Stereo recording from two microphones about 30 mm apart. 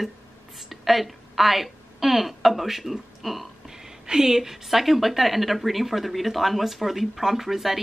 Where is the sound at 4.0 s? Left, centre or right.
Centre.